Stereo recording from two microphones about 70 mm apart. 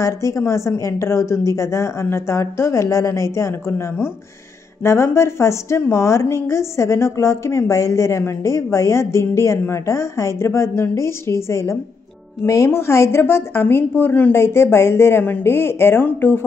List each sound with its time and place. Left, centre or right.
0.0 s a woman's voice: left
13.2 s a woman's voice: left
14.3 s a woman's voice: left